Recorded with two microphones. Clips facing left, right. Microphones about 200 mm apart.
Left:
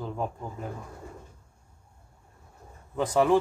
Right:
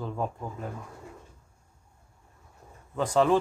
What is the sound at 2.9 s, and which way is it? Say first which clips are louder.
Speech: even; 15° left (ahead or behind).